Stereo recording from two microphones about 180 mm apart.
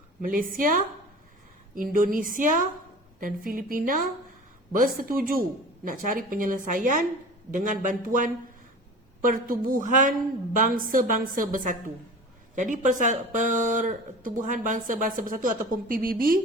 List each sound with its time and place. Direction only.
0.2 s speech: 50° right (ahead or behind)